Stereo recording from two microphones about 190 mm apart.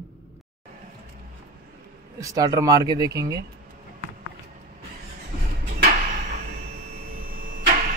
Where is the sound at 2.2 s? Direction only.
20° right (ahead or behind).